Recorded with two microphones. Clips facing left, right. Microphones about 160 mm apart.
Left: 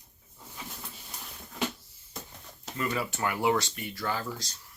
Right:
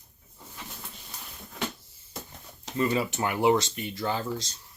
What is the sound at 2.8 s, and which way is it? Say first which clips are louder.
Speech: right 5 dB; 20° right (ahead or behind).